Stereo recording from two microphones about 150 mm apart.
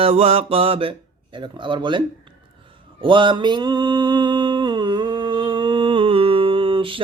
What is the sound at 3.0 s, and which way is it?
Mantra, 35° right (ahead or behind).